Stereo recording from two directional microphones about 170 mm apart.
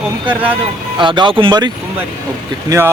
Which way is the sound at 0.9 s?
30° right (ahead or behind).